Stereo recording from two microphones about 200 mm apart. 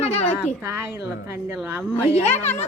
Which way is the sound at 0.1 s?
35° left (ahead or behind).